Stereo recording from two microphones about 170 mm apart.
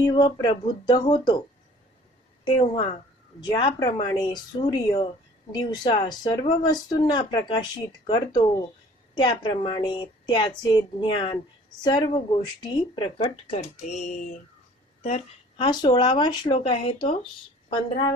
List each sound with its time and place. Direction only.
0.0 s speech: 25° left (ahead or behind)
2.4 s speech: 30° left (ahead or behind)